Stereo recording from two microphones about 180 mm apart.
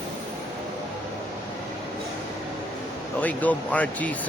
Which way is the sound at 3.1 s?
10° left (ahead or behind).